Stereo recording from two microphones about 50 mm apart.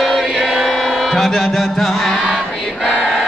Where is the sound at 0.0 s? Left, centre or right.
Centre.